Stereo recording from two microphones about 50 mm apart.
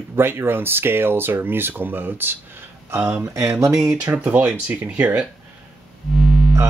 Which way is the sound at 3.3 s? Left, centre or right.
Right.